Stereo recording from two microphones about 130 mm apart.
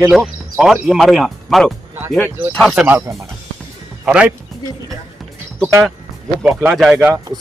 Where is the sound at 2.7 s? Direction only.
10° right (ahead or behind).